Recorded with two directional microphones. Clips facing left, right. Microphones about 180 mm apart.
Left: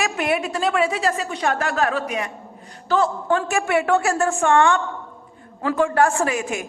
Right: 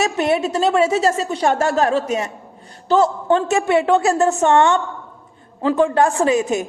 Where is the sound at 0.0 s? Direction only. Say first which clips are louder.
Right 4 dB; 25° right (ahead or behind).